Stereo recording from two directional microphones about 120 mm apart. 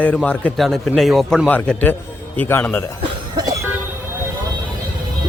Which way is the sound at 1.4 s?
15° left (ahead or behind).